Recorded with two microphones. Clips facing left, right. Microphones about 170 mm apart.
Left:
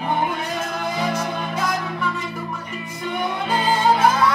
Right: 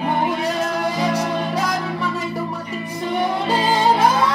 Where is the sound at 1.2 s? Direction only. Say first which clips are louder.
Right 4 dB; 35° right (ahead or behind).